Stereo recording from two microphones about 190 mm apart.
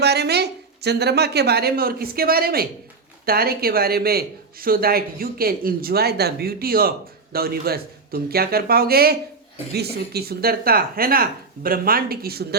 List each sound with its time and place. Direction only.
0.0 s a woman's voice: 60° right (ahead or behind)